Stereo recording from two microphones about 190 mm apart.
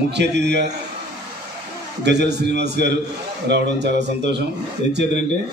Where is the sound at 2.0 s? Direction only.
65° right (ahead or behind).